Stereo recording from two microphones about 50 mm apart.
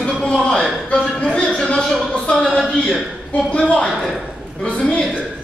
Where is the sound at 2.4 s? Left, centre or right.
Centre.